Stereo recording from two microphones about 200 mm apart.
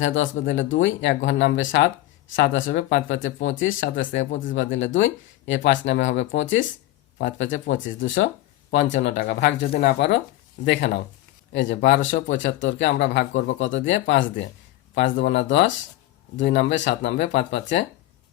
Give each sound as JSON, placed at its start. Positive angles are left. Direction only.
{"t": 0.0, "sound": "speech", "side_deg": 75}
{"t": 9.1, "sound": "speech", "side_deg": 55}